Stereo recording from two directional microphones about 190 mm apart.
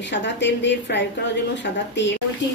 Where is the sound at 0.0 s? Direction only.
70° left (ahead or behind).